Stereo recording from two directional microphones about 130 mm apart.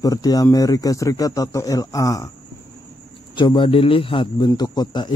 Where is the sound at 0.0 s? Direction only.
30° left (ahead or behind).